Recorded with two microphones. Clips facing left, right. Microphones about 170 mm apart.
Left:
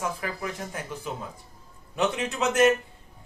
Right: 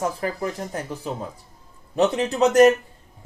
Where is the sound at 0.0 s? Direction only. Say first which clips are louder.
Right 6 dB; 40° right (ahead or behind).